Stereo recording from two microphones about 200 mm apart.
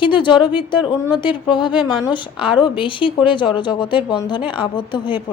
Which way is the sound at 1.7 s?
5° right (ahead or behind).